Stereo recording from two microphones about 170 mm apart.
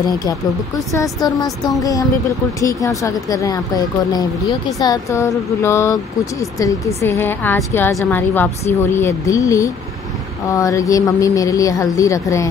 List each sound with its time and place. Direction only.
0.0 s a woman's voice: 20° left (ahead or behind)